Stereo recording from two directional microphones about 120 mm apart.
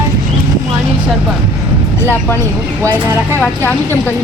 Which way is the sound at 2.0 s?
20° left (ahead or behind).